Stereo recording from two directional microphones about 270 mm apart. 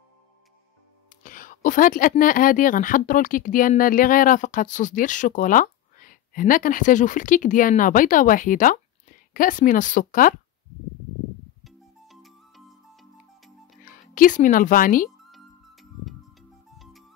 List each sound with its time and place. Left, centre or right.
1.2 s a woman's voice: left
11.6 s music: centre
13.8 s speech: left
15.3 s music: centre